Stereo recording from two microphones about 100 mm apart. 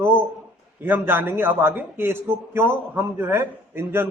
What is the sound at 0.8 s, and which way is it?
A man's voice, 20° right (ahead or behind).